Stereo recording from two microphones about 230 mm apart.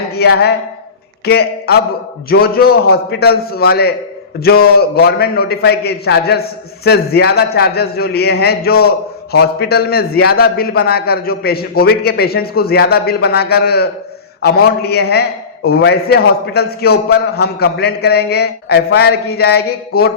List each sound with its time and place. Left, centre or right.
0.1 s a man's voice: left